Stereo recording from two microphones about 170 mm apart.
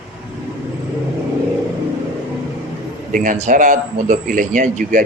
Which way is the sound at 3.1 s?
50° right (ahead or behind).